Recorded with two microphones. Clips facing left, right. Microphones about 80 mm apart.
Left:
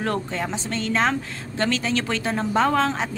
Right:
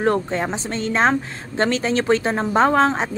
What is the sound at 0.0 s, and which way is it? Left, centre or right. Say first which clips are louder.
A woman's voice: right 6 dB; right.